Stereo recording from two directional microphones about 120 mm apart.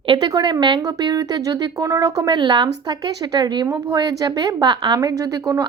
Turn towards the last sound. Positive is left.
turn(degrees=-30)  # may be behind; listen again after turning